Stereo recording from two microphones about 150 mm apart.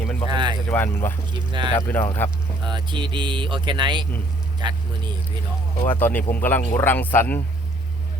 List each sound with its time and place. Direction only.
0.3 s a sound: 30° right (ahead or behind)
0.7 s speech: 15° left (ahead or behind)
1.3 s speech: 30° right (ahead or behind)
1.7 s speech: 15° left (ahead or behind)
2.6 s speech: 30° right (ahead or behind)
5.9 s speech: 15° left (ahead or behind)